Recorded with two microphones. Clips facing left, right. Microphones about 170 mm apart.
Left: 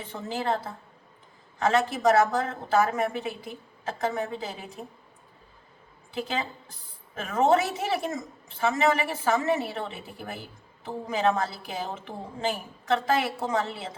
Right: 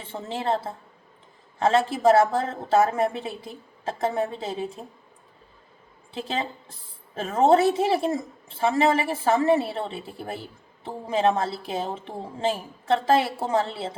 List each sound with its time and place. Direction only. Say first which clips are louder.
0.0 s a woman's voice: right 1 dB; 30° right (ahead or behind)
6.1 s a woman's voice: right 1 dB; 30° right (ahead or behind)